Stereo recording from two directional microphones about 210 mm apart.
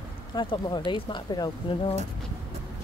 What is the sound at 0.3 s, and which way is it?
Speech, 20° left (ahead or behind).